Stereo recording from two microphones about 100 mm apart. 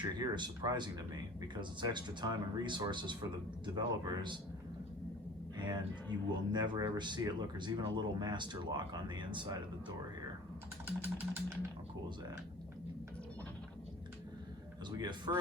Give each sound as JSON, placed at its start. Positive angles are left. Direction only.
{"t": 0.2, "sound": "speech", "side_deg": -45}
{"t": 5.5, "sound": "speech", "side_deg": -50}
{"t": 10.8, "sound": "vehicle", "side_deg": -20}
{"t": 14.8, "sound": "speech", "side_deg": -45}